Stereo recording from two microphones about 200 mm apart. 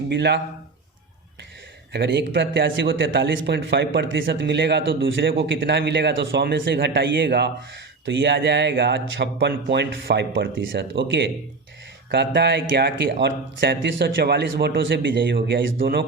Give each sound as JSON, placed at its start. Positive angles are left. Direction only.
{"t": 0.1, "sound": "speech", "side_deg": -60}
{"t": 1.9, "sound": "speech", "side_deg": -60}
{"t": 12.1, "sound": "speech", "side_deg": -55}